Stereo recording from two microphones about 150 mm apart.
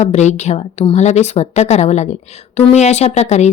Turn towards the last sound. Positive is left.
turn(degrees=50)  # may be behind; listen again after turning